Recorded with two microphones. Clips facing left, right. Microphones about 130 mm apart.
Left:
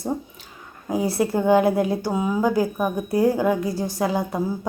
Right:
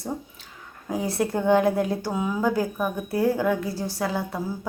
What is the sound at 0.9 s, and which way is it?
A woman's voice, 10° left (ahead or behind).